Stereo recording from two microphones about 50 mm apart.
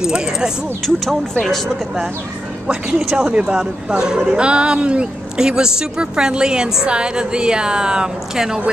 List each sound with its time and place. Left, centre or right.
0.0 s speech: centre
0.8 s speech: centre
2.7 s speech: centre